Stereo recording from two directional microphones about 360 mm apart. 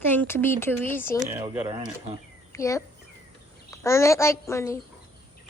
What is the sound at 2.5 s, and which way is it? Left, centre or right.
A child's voice, centre.